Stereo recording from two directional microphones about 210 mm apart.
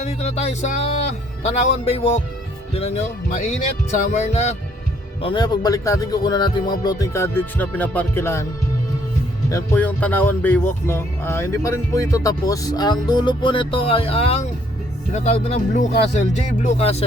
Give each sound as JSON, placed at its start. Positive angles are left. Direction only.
{"t": 0.0, "sound": "speech", "side_deg": 30}
{"t": 5.2, "sound": "speech", "side_deg": 20}
{"t": 9.5, "sound": "speech", "side_deg": 10}